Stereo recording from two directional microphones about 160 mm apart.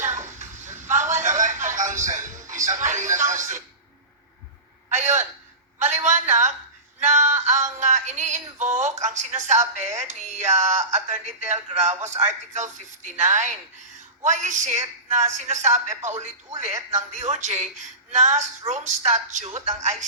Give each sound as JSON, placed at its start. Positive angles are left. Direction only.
{"t": 0.0, "sound": "a sound", "side_deg": -50}
{"t": 3.2, "sound": "a woman's voice", "side_deg": -50}
{"t": 4.9, "sound": "a woman's voice", "side_deg": -50}
{"t": 5.8, "sound": "a sound", "side_deg": -45}
{"t": 7.0, "sound": "synthetic singing", "side_deg": -50}
{"t": 12.0, "sound": "a woman's voice", "side_deg": -45}